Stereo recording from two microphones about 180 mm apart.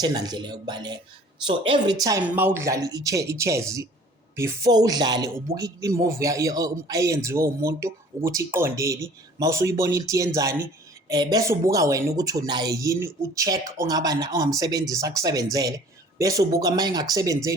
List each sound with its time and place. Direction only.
0.0 s speech: 20° right (ahead or behind)